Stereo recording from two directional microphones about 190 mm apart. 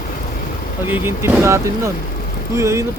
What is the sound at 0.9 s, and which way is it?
Speech, 15° right (ahead or behind).